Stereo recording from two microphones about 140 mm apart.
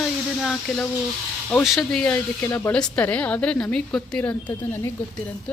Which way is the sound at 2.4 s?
20° left (ahead or behind).